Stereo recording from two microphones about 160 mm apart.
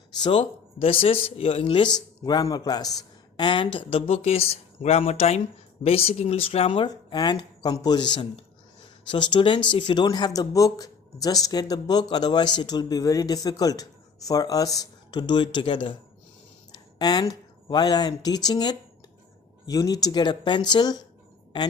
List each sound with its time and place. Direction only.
0.2 s speech: 35° left (ahead or behind)
6.8 s speech: 25° left (ahead or behind)